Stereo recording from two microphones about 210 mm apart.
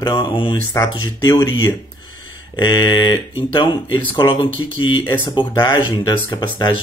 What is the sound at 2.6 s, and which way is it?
Speech, 20° left (ahead or behind).